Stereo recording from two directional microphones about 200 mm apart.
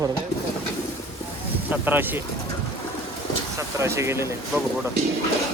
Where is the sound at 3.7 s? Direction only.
15° right (ahead or behind).